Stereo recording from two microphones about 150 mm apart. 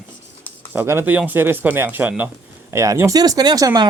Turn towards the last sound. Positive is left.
turn(degrees=-25)  # may be behind; listen again after turning